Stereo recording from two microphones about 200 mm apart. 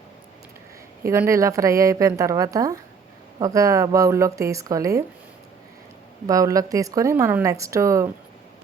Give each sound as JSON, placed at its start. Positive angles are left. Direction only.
{"t": 1.0, "sound": "speech", "side_deg": -15}
{"t": 6.2, "sound": "speech", "side_deg": -15}